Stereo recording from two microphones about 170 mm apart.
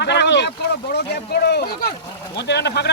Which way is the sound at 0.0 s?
85° left.